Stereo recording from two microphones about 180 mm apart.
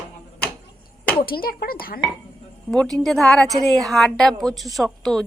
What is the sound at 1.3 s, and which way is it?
Speech, 55° left (ahead or behind).